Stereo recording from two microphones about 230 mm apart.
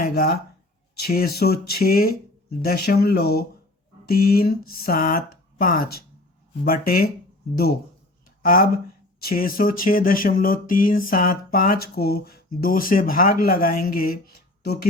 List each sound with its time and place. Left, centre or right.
0.0 s speech: left